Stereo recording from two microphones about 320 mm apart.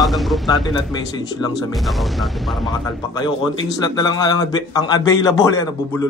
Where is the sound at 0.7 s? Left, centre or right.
Centre.